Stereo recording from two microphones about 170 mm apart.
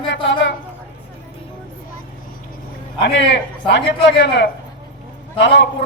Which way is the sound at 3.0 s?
90° left.